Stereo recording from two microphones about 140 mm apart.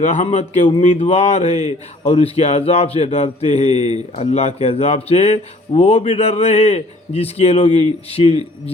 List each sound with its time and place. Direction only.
0.0 s a man's voice: 55° left (ahead or behind)